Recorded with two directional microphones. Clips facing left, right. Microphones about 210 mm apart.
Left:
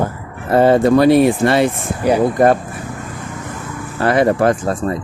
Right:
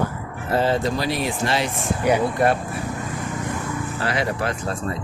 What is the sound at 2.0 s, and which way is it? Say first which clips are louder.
Speech: left 7 dB; 40° left (ahead or behind).